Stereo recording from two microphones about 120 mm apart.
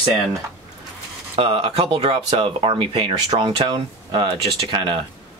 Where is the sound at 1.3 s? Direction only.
50° right (ahead or behind).